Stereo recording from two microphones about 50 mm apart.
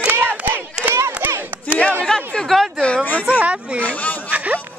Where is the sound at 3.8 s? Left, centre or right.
Left.